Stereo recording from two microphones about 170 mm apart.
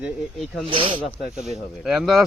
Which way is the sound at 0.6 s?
30° right (ahead or behind).